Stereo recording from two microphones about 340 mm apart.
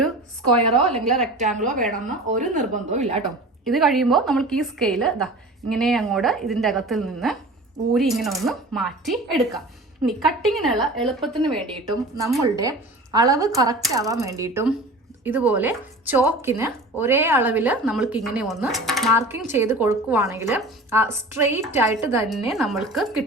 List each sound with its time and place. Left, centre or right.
0.9 s a woman's voice: centre
1.4 s speech: right
3.6 s a woman's voice: centre
12.4 s a woman's voice: centre